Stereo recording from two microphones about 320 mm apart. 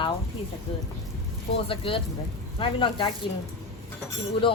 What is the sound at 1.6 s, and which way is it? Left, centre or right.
A woman's voice, centre.